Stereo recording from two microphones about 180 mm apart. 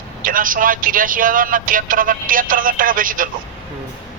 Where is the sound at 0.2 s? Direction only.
50° right (ahead or behind).